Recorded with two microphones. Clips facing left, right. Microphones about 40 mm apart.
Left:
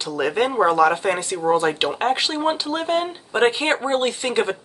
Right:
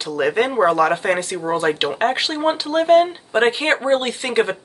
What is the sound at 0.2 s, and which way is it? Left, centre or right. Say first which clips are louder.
Speech: right 2 dB; centre.